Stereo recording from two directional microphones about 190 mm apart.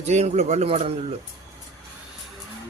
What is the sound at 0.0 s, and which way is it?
Speech, 35° right (ahead or behind).